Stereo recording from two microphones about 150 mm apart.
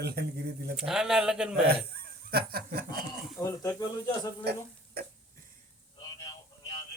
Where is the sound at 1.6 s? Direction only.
90° right.